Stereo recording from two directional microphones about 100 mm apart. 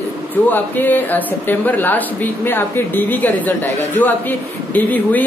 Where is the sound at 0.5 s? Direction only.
20° left (ahead or behind).